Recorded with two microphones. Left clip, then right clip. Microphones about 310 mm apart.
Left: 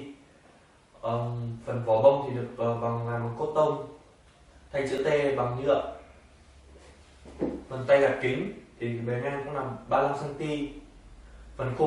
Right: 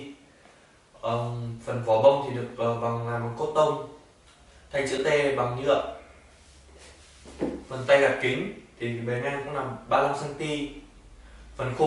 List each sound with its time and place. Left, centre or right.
1.2 s speech: centre
1.7 s speech: centre
3.3 s speech: left
4.6 s speech: centre
7.3 s speech: centre